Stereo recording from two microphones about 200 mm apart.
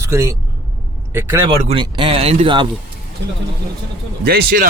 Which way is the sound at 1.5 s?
25° right (ahead or behind).